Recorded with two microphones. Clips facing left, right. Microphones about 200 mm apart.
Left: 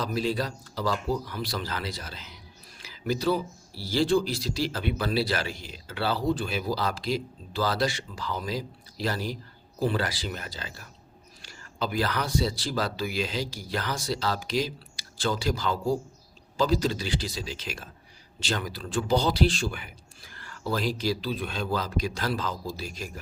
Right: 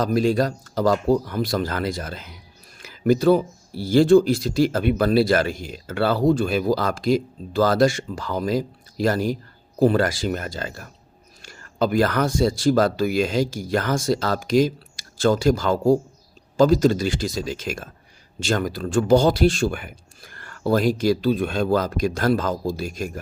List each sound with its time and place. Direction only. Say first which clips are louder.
0.0 s speech: right 9 dB; 45° right (ahead or behind)